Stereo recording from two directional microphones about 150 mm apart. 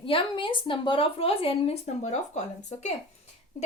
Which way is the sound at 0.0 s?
35° left (ahead or behind).